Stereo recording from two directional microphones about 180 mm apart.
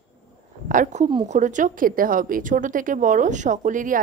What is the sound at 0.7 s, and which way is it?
A woman's voice, 45° right (ahead or behind).